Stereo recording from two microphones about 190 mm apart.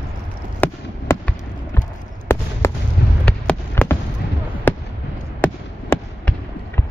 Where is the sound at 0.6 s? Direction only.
10° left (ahead or behind).